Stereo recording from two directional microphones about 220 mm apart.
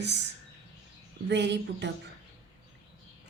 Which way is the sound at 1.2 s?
50° right (ahead or behind).